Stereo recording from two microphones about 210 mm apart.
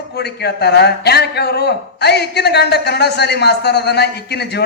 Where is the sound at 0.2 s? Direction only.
50° left (ahead or behind).